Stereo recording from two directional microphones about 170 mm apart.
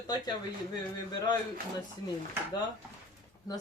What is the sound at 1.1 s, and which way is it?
Speech, 25° left (ahead or behind).